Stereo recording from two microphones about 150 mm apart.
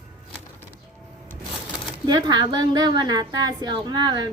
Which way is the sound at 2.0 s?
30° right (ahead or behind).